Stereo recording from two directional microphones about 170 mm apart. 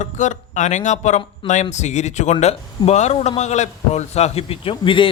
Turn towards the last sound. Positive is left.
turn(degrees=30)  # may be behind; listen again after turning